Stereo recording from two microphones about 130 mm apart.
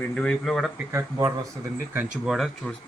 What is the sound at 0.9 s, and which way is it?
Speech, 25° right (ahead or behind).